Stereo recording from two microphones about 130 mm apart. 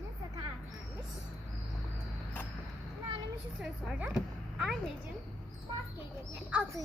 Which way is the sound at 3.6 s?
5° right (ahead or behind).